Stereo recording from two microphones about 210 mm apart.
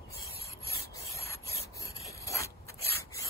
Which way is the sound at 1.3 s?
15° left (ahead or behind).